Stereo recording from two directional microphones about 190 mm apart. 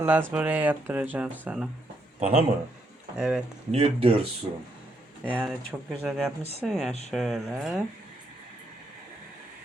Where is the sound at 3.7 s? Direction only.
30° right (ahead or behind).